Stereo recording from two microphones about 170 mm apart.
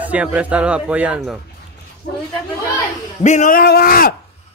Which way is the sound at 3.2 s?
45° left (ahead or behind).